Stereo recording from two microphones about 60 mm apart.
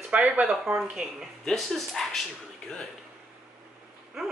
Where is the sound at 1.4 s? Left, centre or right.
Centre.